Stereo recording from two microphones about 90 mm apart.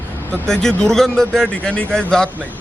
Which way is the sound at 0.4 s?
5° left (ahead or behind).